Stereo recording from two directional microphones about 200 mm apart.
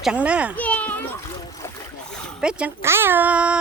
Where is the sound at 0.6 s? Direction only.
5° left (ahead or behind).